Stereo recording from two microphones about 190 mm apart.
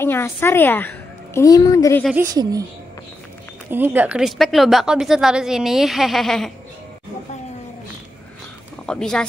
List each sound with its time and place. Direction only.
0.0 s a woman's voice: 10° left (ahead or behind)
2.1 s speech: 20° right (ahead or behind)
3.7 s a woman's voice: 10° right (ahead or behind)
8.8 s a woman's voice: 5° left (ahead or behind)